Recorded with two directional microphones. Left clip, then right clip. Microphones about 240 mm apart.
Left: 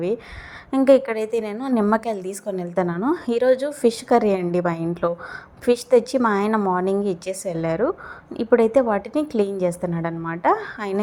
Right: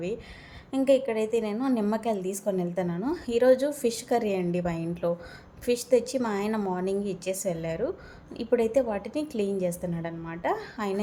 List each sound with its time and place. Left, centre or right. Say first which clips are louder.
0.7 s a woman's voice: left 7 dB; centre